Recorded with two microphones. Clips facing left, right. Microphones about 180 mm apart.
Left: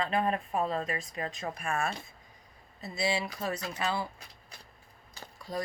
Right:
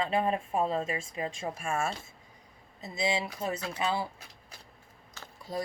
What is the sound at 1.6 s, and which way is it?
Speech, 25° right (ahead or behind).